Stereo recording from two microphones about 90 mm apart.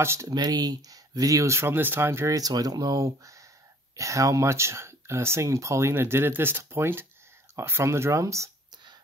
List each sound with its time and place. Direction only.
0.0 s speech: 30° right (ahead or behind)
0.3 s speech: 45° right (ahead or behind); by 2.3 s 30° right (ahead or behind)
2.3 s speech: 45° right (ahead or behind)